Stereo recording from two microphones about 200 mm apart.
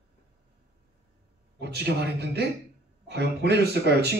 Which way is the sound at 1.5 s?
55° right (ahead or behind).